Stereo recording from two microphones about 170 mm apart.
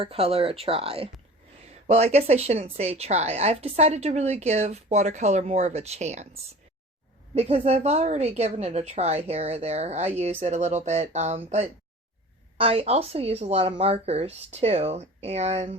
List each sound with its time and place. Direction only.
0.0 s a woman's voice: 35° right (ahead or behind)